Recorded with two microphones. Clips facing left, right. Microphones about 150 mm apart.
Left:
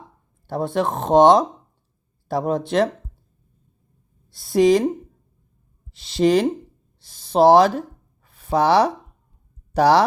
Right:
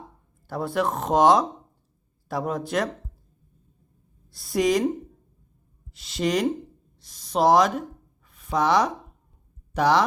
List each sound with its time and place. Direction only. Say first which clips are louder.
0.4 s speech: left 3 dB; 25° left (ahead or behind)
4.4 s speech: left 6 dB; 30° left (ahead or behind)
6.0 s speech: left 7 dB; 30° left (ahead or behind)